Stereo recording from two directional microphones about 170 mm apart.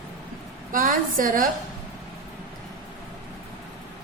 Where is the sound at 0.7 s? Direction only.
55° right (ahead or behind).